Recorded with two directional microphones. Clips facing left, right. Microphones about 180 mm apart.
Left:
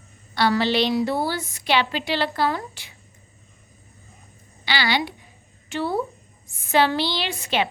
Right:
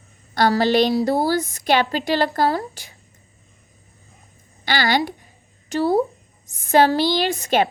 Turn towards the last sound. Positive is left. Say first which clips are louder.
# right 6 dB
turn(degrees=-45)  # may be behind; listen again after turning